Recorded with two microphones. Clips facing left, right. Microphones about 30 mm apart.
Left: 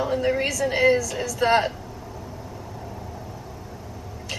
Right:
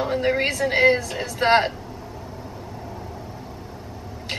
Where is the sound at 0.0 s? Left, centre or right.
Right.